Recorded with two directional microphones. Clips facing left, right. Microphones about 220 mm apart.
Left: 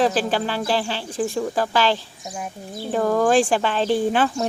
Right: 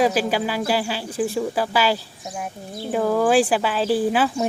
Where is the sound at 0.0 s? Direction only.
10° right (ahead or behind).